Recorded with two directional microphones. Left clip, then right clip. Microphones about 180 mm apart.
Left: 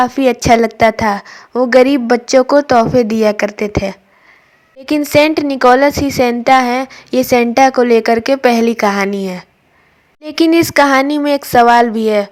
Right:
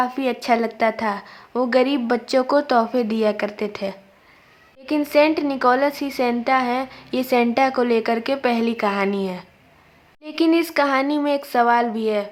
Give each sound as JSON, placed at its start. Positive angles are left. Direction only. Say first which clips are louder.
{"t": 0.0, "sound": "a woman's voice", "louder": "left 10 dB", "side_deg": 35}